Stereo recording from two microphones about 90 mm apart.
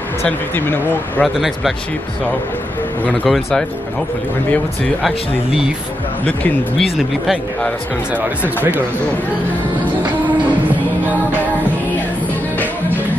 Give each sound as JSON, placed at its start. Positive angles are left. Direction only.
{"t": 0.6, "sound": "speech", "side_deg": 20}
{"t": 1.2, "sound": "speech", "side_deg": 0}
{"t": 3.3, "sound": "speech", "side_deg": 0}
{"t": 6.8, "sound": "speech", "side_deg": 0}